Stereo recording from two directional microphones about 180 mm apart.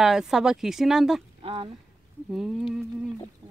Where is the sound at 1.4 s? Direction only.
30° right (ahead or behind).